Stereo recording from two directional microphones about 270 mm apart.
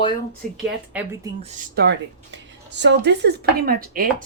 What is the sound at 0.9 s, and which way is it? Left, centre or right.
Speech, centre.